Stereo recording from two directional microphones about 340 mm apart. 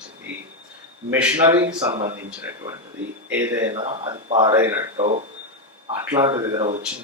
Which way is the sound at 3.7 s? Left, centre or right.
Centre.